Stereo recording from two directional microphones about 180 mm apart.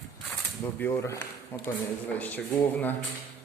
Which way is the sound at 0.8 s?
15° left (ahead or behind).